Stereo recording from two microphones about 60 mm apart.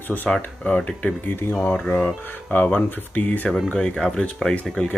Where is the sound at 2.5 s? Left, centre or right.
Left.